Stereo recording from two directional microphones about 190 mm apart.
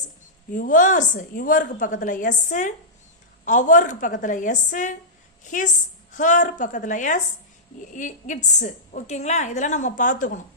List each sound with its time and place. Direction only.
0.5 s a woman's voice: 45° left (ahead or behind)